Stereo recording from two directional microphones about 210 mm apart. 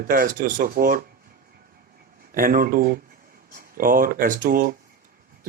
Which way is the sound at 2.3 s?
40° right (ahead or behind).